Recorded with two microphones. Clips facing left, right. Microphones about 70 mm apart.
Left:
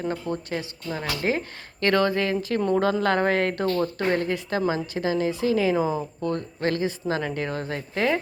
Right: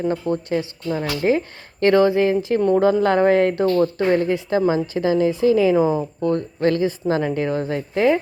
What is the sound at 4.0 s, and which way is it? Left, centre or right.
A woman's voice, right.